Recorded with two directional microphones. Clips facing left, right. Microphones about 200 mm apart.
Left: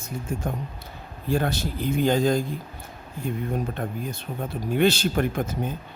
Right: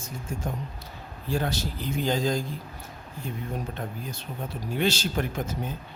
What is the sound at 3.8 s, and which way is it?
A man's voice, 55° left (ahead or behind).